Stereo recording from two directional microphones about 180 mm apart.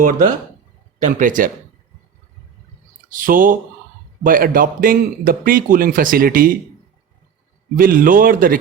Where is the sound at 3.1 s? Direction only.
50° right (ahead or behind).